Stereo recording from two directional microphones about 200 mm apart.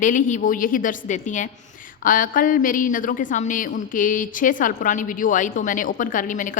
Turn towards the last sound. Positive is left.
turn(degrees=40)  # may be behind; listen again after turning